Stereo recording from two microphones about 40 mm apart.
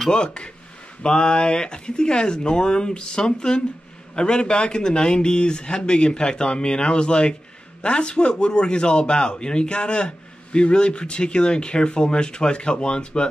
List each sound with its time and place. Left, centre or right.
0.1 s a man's voice: left